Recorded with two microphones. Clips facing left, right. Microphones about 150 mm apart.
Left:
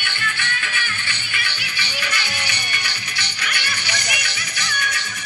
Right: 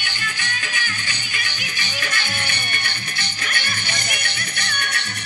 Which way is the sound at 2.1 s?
50° right (ahead or behind).